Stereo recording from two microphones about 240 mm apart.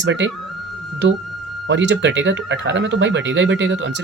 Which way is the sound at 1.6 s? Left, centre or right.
Right.